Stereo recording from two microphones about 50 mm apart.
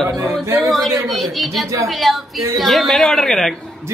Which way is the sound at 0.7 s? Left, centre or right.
Centre.